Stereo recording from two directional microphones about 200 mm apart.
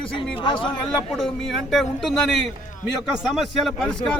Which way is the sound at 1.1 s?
Centre (ahead or behind).